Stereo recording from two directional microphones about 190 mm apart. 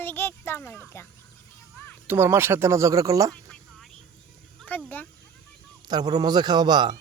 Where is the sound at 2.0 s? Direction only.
10° right (ahead or behind).